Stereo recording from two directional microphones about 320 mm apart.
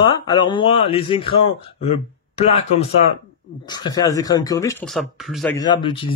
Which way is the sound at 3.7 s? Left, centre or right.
Centre.